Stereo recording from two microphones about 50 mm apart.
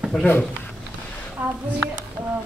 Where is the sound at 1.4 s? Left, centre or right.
Right.